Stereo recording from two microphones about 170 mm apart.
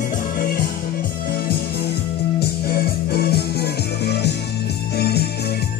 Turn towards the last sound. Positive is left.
turn(degrees=70)  # may be behind; listen again after turning